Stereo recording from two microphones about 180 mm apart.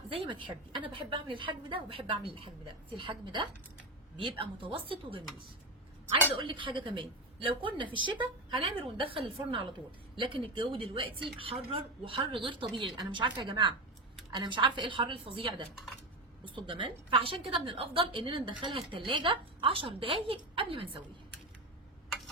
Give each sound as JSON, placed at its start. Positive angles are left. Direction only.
{"t": 0.1, "sound": "a woman's voice", "side_deg": -30}
{"t": 6.4, "sound": "a woman's voice", "side_deg": -30}